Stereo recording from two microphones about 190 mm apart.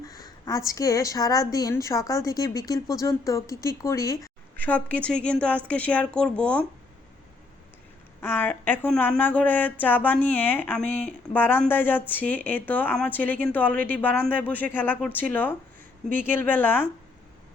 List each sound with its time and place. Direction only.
0.0 s speech: 20° left (ahead or behind)
8.2 s speech: 10° left (ahead or behind)